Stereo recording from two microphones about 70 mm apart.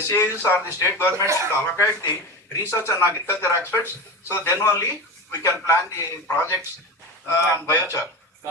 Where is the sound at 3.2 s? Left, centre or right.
Left.